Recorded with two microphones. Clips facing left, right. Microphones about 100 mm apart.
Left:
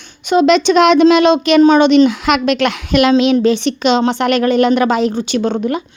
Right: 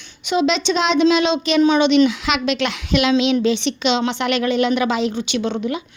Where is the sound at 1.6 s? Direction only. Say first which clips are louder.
Left 4 dB; 45° left (ahead or behind).